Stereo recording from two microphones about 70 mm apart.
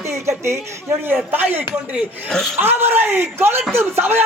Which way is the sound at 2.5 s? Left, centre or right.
Right.